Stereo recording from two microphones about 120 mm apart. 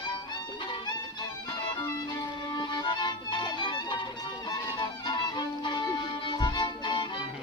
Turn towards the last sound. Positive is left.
turn(degrees=40)  # may be behind; listen again after turning